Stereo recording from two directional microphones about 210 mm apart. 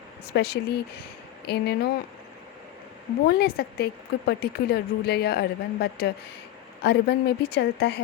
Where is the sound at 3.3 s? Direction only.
50° left (ahead or behind).